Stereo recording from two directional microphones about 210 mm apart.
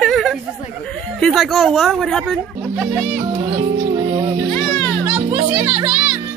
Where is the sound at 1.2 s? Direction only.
Centre (ahead or behind).